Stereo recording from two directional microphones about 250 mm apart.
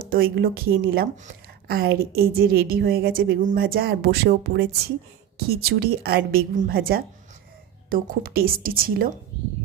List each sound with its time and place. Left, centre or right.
0.0 s a woman's voice: right